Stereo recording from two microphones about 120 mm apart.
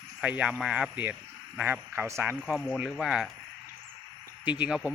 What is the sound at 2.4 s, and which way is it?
Speech, centre (ahead or behind).